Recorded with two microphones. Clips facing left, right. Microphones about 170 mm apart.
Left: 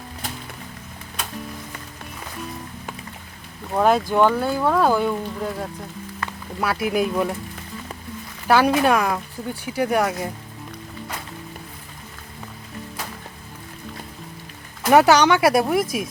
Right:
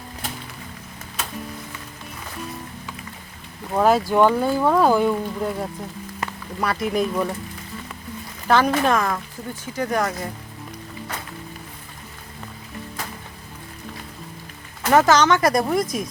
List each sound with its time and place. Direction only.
3.7 s speech: centre (ahead or behind)
6.2 s music: 20° right (ahead or behind)
6.6 s speech: 5° left (ahead or behind)
8.4 s speech: 10° left (ahead or behind)
14.8 s speech: 10° left (ahead or behind)